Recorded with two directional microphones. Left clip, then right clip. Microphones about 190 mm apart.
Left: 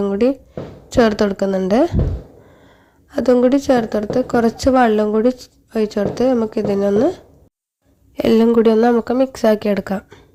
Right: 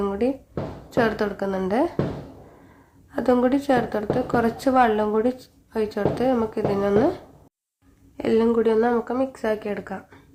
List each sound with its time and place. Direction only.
0.0 s a sound: 35° left (ahead or behind)
0.9 s a woman's voice: 40° left (ahead or behind)
3.1 s a woman's voice: 35° left (ahead or behind)
8.1 s speech: 50° left (ahead or behind)